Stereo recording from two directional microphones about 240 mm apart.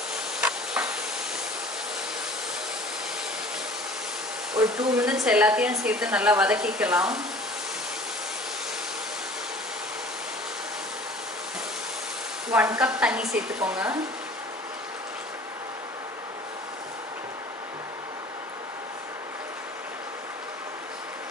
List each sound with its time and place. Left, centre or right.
0.4 s a sound: centre
4.6 s speech: centre
12.4 s speech: centre